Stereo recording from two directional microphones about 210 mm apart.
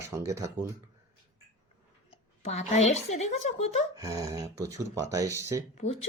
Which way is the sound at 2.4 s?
30° left (ahead or behind).